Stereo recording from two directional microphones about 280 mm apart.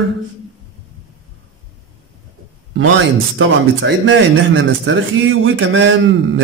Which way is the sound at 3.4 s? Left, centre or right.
Right.